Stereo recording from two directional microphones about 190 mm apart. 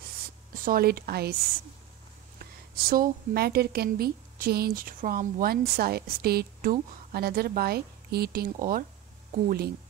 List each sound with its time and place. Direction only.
0.7 s a woman's voice: 50° right (ahead or behind)
2.3 s a woman's voice: 50° right (ahead or behind)